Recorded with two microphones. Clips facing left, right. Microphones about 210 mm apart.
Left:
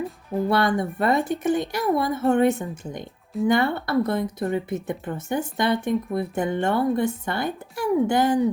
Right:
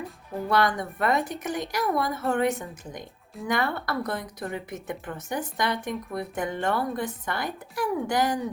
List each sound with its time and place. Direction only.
0.4 s speech: 30° left (ahead or behind)